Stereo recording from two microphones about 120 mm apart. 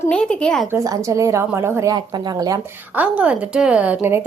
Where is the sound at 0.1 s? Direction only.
10° left (ahead or behind).